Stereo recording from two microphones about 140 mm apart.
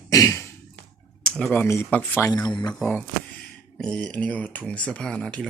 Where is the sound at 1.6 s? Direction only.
20° left (ahead or behind).